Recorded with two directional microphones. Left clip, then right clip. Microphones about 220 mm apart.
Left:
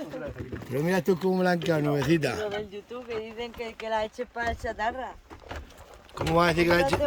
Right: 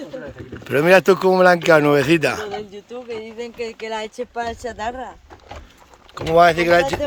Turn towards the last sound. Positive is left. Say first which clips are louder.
# right 7 dB
turn(degrees=5)  # may be behind; listen again after turning